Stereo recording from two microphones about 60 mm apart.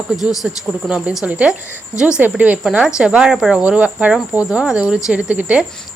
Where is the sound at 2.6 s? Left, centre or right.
Centre.